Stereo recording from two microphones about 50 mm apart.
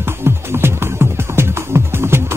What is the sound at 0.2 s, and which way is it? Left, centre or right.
Music, right.